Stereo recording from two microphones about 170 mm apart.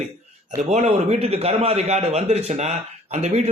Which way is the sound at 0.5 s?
45° right (ahead or behind).